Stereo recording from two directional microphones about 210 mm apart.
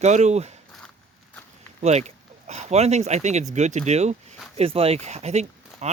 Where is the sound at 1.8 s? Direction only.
30° right (ahead or behind).